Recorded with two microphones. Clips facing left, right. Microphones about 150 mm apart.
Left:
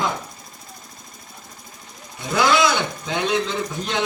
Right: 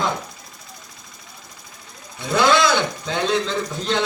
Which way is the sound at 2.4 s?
15° left (ahead or behind).